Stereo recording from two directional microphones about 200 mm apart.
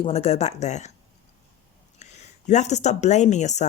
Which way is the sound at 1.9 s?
35° left (ahead or behind).